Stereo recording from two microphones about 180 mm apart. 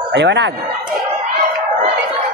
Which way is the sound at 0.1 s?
75° right (ahead or behind).